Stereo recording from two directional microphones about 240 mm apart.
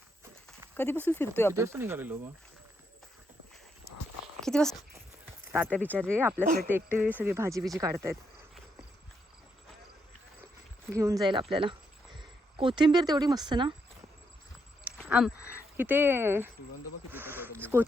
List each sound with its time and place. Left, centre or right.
1.0 s speech: centre
1.5 s speech: centre
4.4 s a sound: centre
5.5 s speech: centre
5.8 s speech: centre
6.1 s speech: centre
6.4 s speech: right
6.9 s speech: centre
10.8 s speech: centre
14.9 s speech: centre